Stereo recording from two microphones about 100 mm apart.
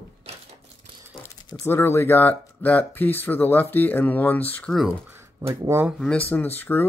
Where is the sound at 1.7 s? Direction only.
25° left (ahead or behind).